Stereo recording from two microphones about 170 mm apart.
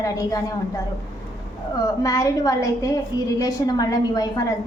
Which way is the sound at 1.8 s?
20° left (ahead or behind).